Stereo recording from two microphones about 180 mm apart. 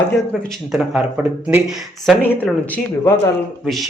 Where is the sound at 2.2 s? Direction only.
10° left (ahead or behind).